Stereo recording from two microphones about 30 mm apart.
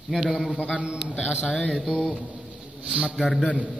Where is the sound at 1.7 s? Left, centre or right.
Centre.